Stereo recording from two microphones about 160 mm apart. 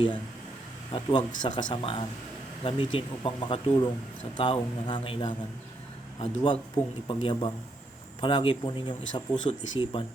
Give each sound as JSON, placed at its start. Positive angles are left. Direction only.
{"t": 0.9, "sound": "speech", "side_deg": 30}